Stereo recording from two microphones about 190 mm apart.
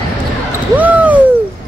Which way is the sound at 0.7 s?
10° right (ahead or behind).